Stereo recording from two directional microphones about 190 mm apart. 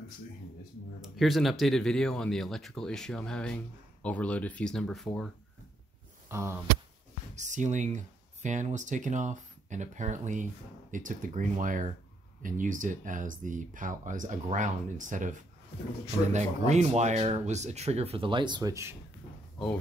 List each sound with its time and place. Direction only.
1.0 s speech: centre (ahead or behind)
6.2 s a sound: 10° right (ahead or behind)
7.3 s speech: 40° right (ahead or behind); by 18.9 s 15° right (ahead or behind)